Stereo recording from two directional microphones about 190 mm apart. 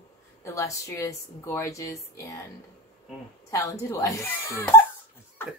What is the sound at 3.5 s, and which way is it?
Speech, 15° left (ahead or behind).